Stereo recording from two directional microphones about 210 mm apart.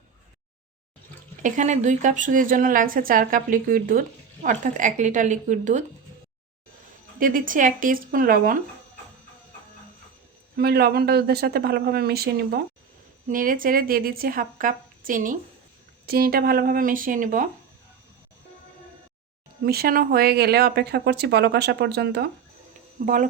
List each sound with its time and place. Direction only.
1.4 s a woman's voice: 35° right (ahead or behind)
7.2 s a woman's voice: 40° right (ahead or behind)
10.6 s a woman's voice: 50° right (ahead or behind)
19.6 s speech: 45° right (ahead or behind)
23.0 s a woman's voice: 40° right (ahead or behind)